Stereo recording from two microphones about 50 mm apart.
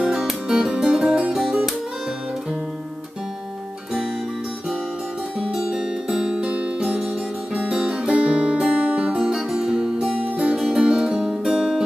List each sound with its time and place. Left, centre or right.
0.0 s music: centre
5.5 s music: centre
9.1 s music: centre
10.1 s music: right